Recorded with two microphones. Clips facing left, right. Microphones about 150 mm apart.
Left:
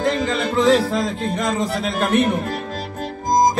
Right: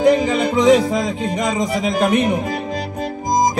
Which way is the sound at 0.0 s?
15° right (ahead or behind).